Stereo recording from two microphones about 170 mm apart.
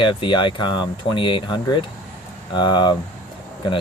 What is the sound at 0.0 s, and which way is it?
Speech, 30° left (ahead or behind).